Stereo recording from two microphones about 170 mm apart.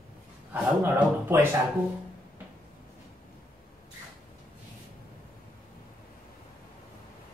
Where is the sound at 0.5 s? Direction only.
10° right (ahead or behind).